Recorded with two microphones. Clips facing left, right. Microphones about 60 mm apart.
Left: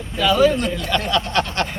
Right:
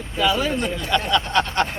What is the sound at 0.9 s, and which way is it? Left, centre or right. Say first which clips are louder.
Speech: right 2 dB; centre.